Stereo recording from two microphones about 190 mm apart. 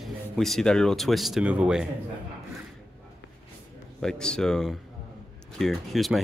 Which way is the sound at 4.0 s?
5° left (ahead or behind).